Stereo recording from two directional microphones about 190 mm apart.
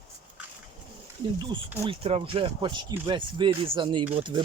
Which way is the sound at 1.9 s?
30° right (ahead or behind).